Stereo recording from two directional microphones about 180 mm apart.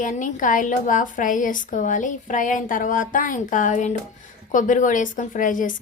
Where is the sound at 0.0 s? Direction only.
45° left (ahead or behind).